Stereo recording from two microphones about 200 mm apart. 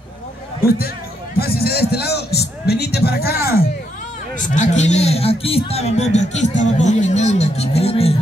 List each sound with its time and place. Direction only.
0.7 s a man's voice: 50° left (ahead or behind)
4.4 s a man's voice: 35° left (ahead or behind)